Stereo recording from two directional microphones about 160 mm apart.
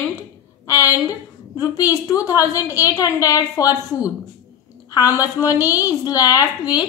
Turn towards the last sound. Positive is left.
turn(degrees=25)  # may be behind; listen again after turning